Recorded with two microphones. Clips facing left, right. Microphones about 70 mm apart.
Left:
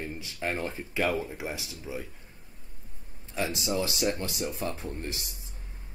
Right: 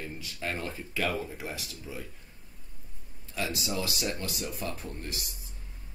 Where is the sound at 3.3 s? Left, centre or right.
Left.